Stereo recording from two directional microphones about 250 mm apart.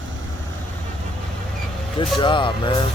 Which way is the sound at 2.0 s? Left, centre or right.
Centre.